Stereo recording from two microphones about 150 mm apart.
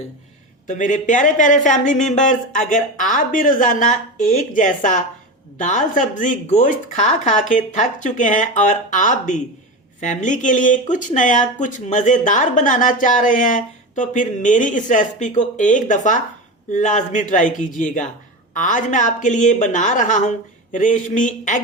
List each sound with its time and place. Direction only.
0.7 s speech: 60° left (ahead or behind)